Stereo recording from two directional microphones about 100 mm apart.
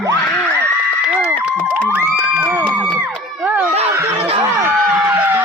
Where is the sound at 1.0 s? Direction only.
10° right (ahead or behind).